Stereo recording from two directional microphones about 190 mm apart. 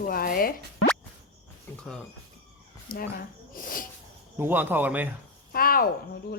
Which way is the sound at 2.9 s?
50° left (ahead or behind).